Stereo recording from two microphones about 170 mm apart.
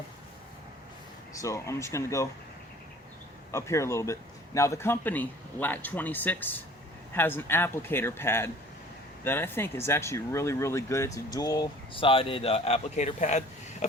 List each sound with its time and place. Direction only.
1.4 s a man's voice: 20° left (ahead or behind)
3.5 s a man's voice: 15° left (ahead or behind); by 13.8 s 45° left (ahead or behind)